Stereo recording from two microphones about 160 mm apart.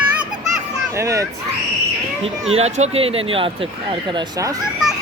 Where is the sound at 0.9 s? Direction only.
20° right (ahead or behind).